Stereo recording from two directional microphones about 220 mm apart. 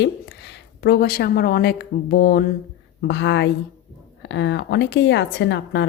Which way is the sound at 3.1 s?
55° left (ahead or behind).